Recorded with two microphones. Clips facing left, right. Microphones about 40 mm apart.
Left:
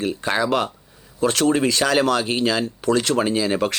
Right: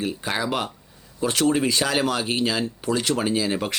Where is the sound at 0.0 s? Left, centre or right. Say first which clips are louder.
Left 4 dB; left.